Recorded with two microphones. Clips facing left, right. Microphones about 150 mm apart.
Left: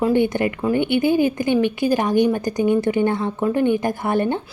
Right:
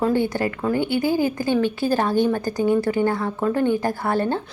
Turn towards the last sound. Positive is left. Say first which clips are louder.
# left 2 dB
turn(degrees=20)  # may be behind; listen again after turning